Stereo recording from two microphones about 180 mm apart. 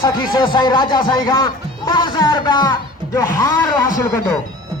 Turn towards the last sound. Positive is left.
turn(degrees=15)  # may be behind; listen again after turning